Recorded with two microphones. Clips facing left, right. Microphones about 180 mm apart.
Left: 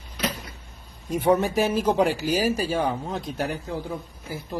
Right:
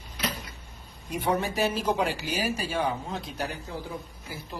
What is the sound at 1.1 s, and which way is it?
Speech, 45° left (ahead or behind).